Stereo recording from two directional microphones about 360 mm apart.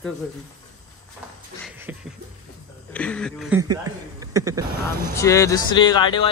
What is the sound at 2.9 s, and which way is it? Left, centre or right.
Speech, centre.